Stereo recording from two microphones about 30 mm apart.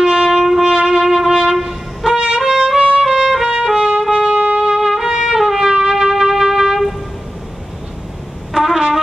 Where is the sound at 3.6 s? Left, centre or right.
Centre.